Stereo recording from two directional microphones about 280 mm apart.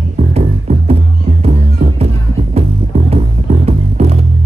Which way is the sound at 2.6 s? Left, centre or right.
Right.